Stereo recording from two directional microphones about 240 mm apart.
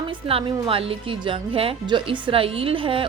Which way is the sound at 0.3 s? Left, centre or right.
Right.